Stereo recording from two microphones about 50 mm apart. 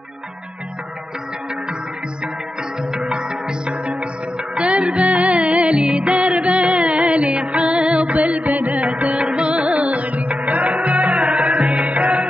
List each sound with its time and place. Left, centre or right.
2.9 s music: centre
4.9 s music: right
8.8 s music: centre